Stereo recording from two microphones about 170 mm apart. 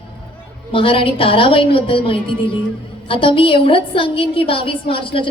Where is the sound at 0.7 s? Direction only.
30° left (ahead or behind).